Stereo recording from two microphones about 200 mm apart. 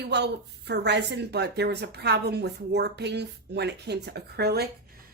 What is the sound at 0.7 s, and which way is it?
A woman's voice, 60° right (ahead or behind).